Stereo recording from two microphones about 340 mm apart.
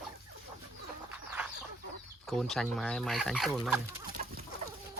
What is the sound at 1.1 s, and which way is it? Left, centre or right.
Chicken, centre.